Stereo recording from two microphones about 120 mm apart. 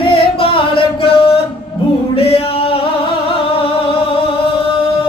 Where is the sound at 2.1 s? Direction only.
50° left (ahead or behind).